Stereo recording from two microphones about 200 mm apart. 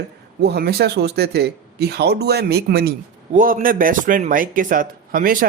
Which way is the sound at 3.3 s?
40° right (ahead or behind).